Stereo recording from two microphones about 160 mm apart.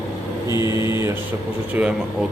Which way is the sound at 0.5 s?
20° right (ahead or behind).